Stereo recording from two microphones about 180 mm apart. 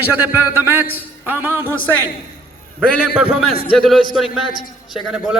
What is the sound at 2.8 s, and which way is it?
Speech, 5° left (ahead or behind).